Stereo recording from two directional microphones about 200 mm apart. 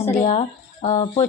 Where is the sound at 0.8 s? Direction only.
35° left (ahead or behind).